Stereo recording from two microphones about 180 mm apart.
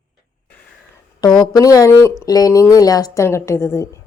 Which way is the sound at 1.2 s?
20° left (ahead or behind).